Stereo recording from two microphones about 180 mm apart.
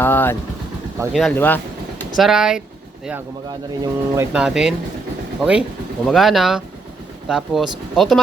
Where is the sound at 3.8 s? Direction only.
15° right (ahead or behind).